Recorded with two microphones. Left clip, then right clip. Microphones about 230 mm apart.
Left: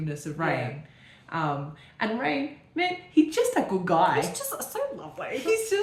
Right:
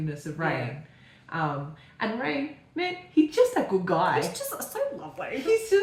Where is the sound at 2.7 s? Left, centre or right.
Left.